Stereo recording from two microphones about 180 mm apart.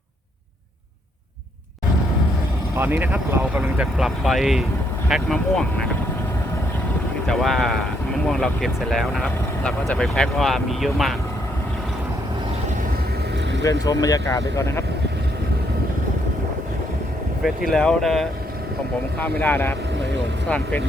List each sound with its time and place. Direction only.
2.7 s speech: 10° right (ahead or behind)
7.3 s speech: centre (ahead or behind)
13.6 s speech: 20° left (ahead or behind)
17.4 s speech: centre (ahead or behind)